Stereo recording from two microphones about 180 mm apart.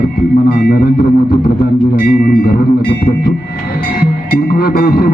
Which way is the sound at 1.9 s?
55° left (ahead or behind).